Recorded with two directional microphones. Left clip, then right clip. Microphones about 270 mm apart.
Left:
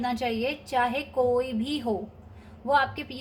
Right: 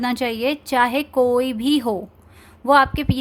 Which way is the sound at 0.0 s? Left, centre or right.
Right.